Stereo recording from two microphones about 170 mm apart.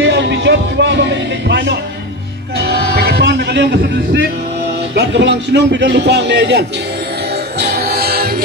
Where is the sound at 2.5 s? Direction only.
70° right (ahead or behind).